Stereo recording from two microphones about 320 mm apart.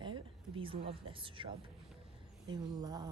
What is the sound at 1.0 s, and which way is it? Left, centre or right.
Speech, centre.